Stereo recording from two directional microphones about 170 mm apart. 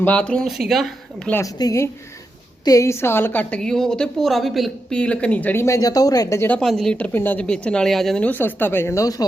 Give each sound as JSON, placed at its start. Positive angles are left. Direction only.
{"t": 0.0, "sound": "speech", "side_deg": 10}
{"t": 1.3, "sound": "a woman's voice", "side_deg": 20}
{"t": 6.6, "sound": "a woman's voice", "side_deg": 0}